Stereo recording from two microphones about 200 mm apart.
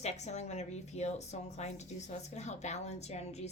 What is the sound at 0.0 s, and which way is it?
A woman's voice, 35° left (ahead or behind).